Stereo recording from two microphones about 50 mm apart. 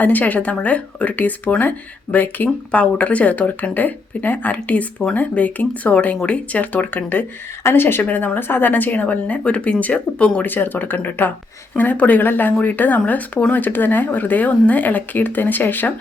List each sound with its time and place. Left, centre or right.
0.0 s speech: left
8.0 s speech: left
8.4 s speech: left
10.4 s speech: left